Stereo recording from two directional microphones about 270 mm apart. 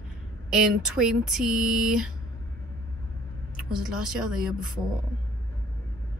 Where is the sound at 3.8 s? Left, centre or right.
Centre.